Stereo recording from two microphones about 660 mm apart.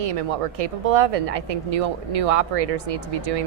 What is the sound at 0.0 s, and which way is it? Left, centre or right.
Speech, right.